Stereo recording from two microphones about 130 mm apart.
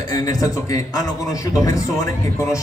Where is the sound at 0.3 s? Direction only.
25° left (ahead or behind).